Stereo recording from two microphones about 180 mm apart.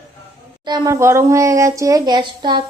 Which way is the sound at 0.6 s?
25° right (ahead or behind).